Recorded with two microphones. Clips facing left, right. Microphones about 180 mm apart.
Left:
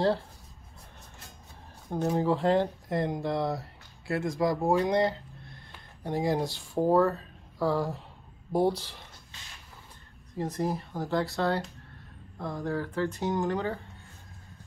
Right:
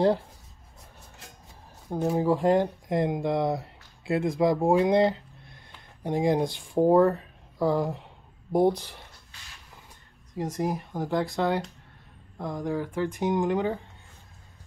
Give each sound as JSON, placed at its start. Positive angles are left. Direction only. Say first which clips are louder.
{"t": 1.9, "sound": "speech", "louder": "right 2 dB", "side_deg": -10}
{"t": 10.3, "sound": "speech", "louder": "right 2 dB", "side_deg": -15}